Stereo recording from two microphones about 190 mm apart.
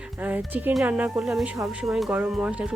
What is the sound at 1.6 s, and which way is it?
Speech, centre (ahead or behind).